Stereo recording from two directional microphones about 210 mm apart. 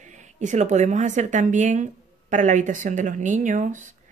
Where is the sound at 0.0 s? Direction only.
35° right (ahead or behind).